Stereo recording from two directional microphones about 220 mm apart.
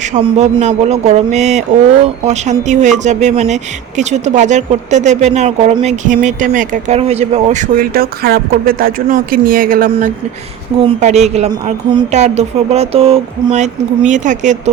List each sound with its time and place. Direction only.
0.1 s speech: 30° right (ahead or behind)
10.8 s a woman's voice: 30° right (ahead or behind)